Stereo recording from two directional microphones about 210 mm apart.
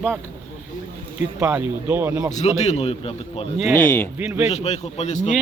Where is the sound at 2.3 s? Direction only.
35° left (ahead or behind).